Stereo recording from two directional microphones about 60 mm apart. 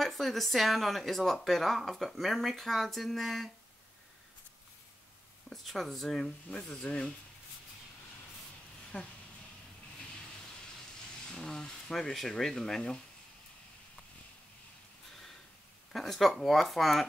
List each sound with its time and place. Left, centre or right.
0.0 s speech: centre
5.5 s speech: centre
8.9 s speech: left
11.3 s speech: centre
15.9 s speech: centre